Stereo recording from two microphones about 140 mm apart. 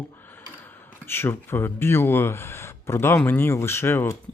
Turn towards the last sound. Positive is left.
turn(degrees=15)  # may be behind; listen again after turning